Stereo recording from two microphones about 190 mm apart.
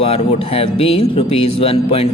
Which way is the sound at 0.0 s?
30° left (ahead or behind).